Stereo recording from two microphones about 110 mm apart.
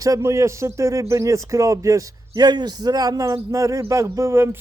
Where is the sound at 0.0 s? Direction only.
30° right (ahead or behind).